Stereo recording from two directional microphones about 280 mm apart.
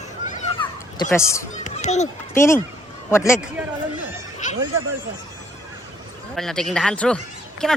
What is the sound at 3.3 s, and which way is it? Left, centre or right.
Speech, centre.